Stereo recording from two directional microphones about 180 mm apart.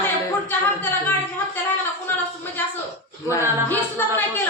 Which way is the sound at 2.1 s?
10° left (ahead or behind).